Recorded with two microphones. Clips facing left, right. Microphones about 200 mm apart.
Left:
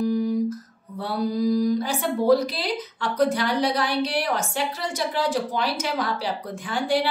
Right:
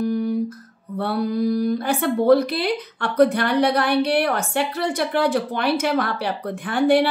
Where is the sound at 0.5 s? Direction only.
60° right (ahead or behind).